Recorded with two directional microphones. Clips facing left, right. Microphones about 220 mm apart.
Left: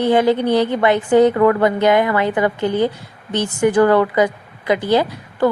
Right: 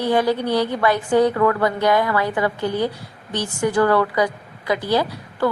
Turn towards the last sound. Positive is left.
turn(degrees=20)  # may be behind; listen again after turning